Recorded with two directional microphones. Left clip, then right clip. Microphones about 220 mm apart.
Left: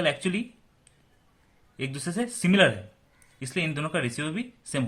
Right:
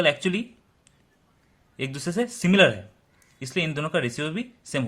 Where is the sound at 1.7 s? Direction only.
20° right (ahead or behind).